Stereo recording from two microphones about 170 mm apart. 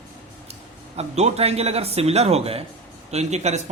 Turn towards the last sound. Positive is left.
turn(degrees=-40)  # may be behind; listen again after turning